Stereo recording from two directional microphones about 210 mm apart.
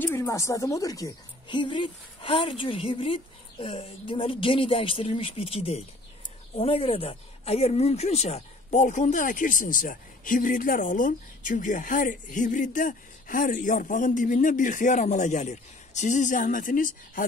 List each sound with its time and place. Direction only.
0.0 s a woman's voice: 10° left (ahead or behind); by 17.3 s 40° left (ahead or behind)